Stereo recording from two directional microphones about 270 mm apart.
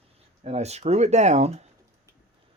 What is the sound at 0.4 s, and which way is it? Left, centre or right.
Speech, right.